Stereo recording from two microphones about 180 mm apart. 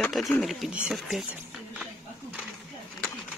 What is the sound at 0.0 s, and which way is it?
Speech, centre (ahead or behind).